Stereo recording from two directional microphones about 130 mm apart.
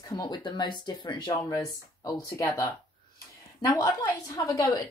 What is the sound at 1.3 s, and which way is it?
A woman's voice, 25° left (ahead or behind).